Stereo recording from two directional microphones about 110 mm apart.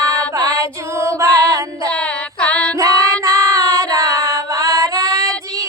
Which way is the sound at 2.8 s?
30° right (ahead or behind).